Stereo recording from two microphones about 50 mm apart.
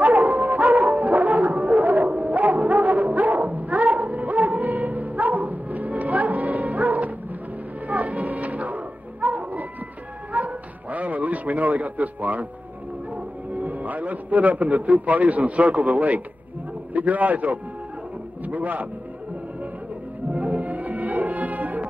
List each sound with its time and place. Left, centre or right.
0.0 s music: right
7.8 s dog: right
10.3 s music: right
13.1 s a man's voice: right
20.3 s music: right